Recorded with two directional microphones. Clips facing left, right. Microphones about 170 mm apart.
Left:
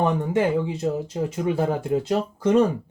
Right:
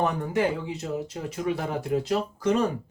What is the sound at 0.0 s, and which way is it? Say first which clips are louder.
Speech: left 3 dB; 25° left (ahead or behind).